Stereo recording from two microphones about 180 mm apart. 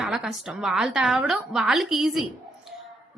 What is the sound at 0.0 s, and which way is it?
A woman's voice, centre (ahead or behind).